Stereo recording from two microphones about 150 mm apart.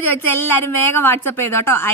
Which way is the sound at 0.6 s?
15° left (ahead or behind).